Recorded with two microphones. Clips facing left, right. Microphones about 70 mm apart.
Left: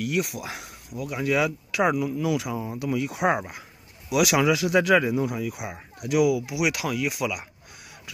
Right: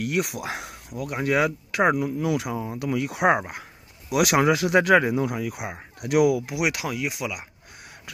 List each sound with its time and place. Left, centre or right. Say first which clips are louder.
0.0 s speech: right 1 dB; right
1.1 s speech: right 1 dB; right
2.8 s speech: right 2 dB; right; by 7.4 s centre